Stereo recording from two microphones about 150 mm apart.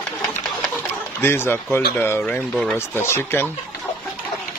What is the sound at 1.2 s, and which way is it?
Speech, 15° left (ahead or behind).